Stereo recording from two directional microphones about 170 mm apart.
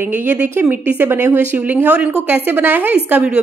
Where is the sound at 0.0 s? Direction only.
10° right (ahead or behind).